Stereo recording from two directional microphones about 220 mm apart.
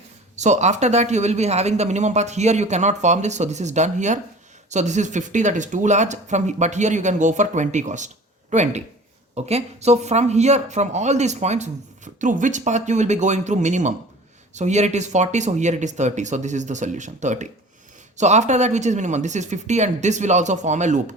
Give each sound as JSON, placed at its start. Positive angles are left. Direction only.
{"t": 0.3, "sound": "speech", "side_deg": -30}